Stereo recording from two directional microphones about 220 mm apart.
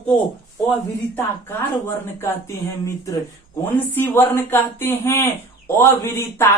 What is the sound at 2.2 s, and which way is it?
Speech, 10° left (ahead or behind).